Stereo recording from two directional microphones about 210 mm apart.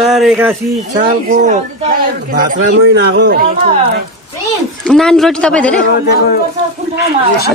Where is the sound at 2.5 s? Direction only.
50° right (ahead or behind).